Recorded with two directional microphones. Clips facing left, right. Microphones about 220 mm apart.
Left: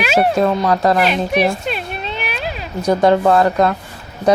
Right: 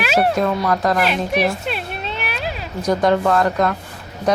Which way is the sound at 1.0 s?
5° right (ahead or behind).